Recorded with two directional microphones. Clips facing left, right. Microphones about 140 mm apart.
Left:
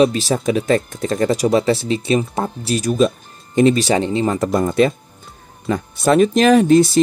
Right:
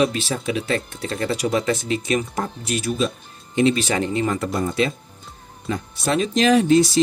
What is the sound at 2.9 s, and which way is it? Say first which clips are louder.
Speech: left 9 dB; 45° left (ahead or behind).